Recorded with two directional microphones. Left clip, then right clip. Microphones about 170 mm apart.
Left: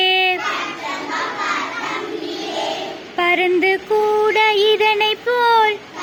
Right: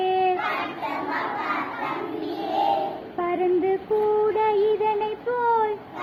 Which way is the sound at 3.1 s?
35° left (ahead or behind).